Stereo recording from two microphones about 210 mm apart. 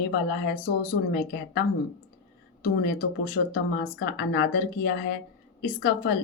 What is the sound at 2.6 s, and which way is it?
A woman's voice, 50° left (ahead or behind).